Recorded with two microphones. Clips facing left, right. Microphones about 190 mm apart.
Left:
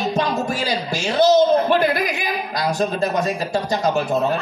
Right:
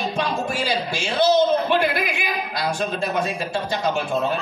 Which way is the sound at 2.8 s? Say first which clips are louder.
Left 5 dB; 40° left (ahead or behind).